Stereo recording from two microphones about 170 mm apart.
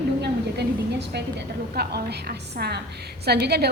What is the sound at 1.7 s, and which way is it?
A woman's voice, 70° right (ahead or behind).